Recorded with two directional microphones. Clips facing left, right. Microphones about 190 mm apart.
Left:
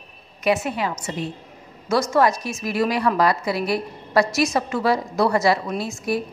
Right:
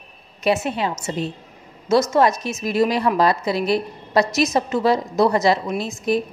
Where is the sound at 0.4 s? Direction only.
25° right (ahead or behind).